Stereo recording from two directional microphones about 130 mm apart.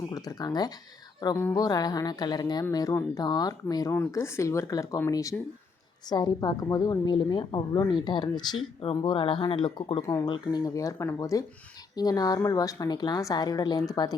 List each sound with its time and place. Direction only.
0.1 s a woman's voice: 30° left (ahead or behind)
10.0 s a woman's voice: 20° left (ahead or behind)
10.2 s a woman's voice: 35° left (ahead or behind)